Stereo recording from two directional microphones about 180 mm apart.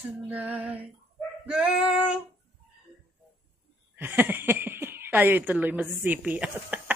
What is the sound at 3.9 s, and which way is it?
Speech, 10° right (ahead or behind).